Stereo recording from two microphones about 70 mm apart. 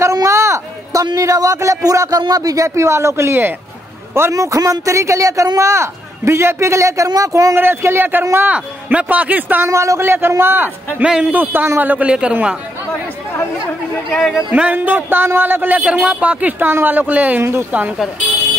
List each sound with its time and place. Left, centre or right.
0.0 s a sound: right
1.0 s a man's voice: right
4.3 s a man's voice: right
7.2 s a man's voice: right
7.5 s speech: right
8.5 s speech: centre
9.7 s speech: right
11.9 s a man's voice: centre
14.1 s speech: centre
14.5 s speech: right
15.8 s speech: centre
17.4 s speech: right